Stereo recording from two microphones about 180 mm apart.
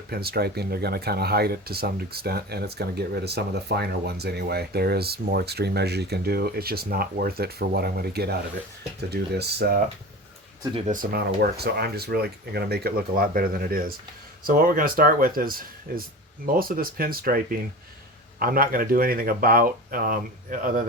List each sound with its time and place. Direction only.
0.1 s speech: 60° right (ahead or behind)
11.0 s speech: 55° right (ahead or behind)